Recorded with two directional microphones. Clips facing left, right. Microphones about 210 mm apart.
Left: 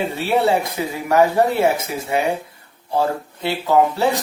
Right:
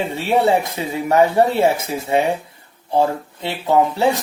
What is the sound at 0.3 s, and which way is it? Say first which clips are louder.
Speech: right 2 dB; 20° right (ahead or behind).